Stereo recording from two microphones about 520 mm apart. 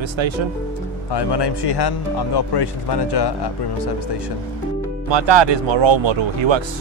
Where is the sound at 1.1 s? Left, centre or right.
Left.